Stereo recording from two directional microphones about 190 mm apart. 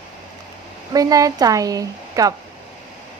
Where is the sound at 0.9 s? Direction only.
20° right (ahead or behind).